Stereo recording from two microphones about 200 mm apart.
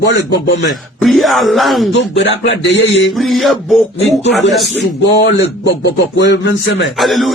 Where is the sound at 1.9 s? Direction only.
60° left (ahead or behind).